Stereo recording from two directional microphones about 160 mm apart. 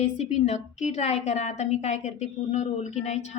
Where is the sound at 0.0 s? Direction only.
45° left (ahead or behind).